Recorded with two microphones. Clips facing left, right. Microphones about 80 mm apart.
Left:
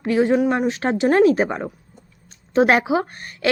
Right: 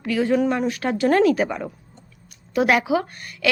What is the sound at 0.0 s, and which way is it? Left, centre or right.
A woman's voice, left.